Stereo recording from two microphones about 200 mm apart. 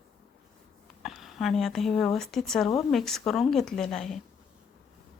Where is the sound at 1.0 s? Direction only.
Centre (ahead or behind).